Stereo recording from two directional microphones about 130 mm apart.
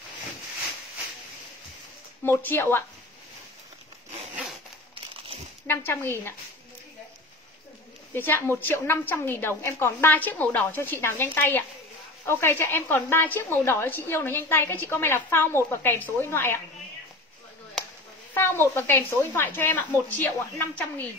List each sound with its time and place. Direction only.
2.2 s a woman's voice: 15° left (ahead or behind)
5.7 s a woman's voice: 15° left (ahead or behind)
8.1 s a woman's voice: 15° left (ahead or behind)
18.3 s a woman's voice: 20° left (ahead or behind)